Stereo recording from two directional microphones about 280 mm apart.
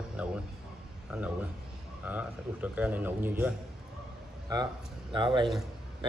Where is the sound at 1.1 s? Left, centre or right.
Centre.